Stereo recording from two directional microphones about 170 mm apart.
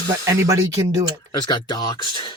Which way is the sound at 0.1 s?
20° right (ahead or behind).